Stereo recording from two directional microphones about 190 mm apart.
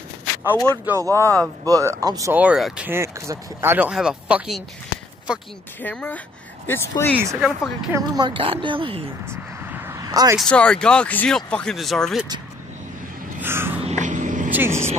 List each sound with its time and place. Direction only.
0.8 s speech: 15° right (ahead or behind)
1.3 s speech: 5° left (ahead or behind)
1.7 s speech: 15° right (ahead or behind)
5.8 s speech: 10° left (ahead or behind)
7.2 s speech: 10° right (ahead or behind)
7.9 s speech: 25° right (ahead or behind)
9.2 s a sound: 10° right (ahead or behind)
10.3 s speech: 5° left (ahead or behind)
13.4 s a sound: 10° right (ahead or behind)
13.8 s vehicle: 40° right (ahead or behind)
14.5 s speech: 10° right (ahead or behind)